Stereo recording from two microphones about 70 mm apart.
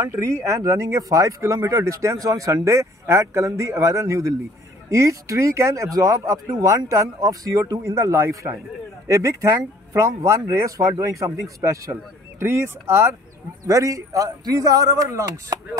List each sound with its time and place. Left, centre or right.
0.0 s speech: right
7.2 s a man's voice: right